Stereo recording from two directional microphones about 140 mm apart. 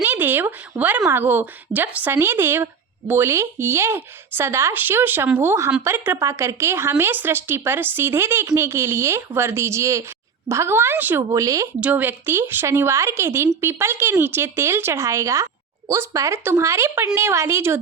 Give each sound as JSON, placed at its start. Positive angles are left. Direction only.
{"t": 0.0, "sound": "a child's voice", "side_deg": -15}
{"t": 11.2, "sound": "a child's voice", "side_deg": -25}
{"t": 11.8, "sound": "a child's voice", "side_deg": -10}